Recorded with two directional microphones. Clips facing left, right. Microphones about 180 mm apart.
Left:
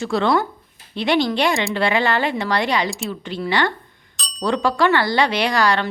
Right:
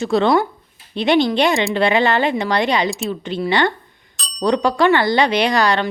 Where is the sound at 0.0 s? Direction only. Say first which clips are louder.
Right 3 dB; 20° right (ahead or behind).